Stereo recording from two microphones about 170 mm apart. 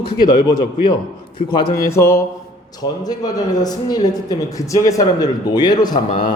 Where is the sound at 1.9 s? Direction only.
15° left (ahead or behind).